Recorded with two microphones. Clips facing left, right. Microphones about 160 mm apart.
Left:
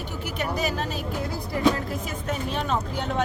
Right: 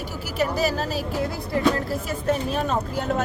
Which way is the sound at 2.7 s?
5° right (ahead or behind).